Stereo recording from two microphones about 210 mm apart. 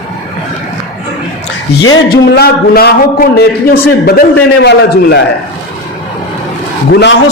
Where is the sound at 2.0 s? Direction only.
45° left (ahead or behind).